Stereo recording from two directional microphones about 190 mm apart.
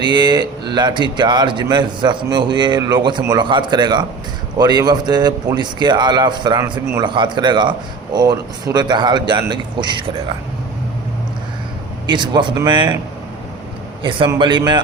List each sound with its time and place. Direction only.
0.0 s speech: 20° right (ahead or behind)
12.0 s speech: 25° right (ahead or behind)
14.0 s speech: 25° right (ahead or behind)